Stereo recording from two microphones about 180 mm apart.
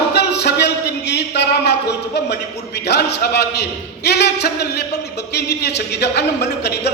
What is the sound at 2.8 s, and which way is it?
A man's voice, 65° left (ahead or behind).